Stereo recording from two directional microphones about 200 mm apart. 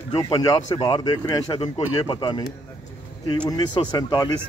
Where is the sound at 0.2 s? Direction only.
20° left (ahead or behind).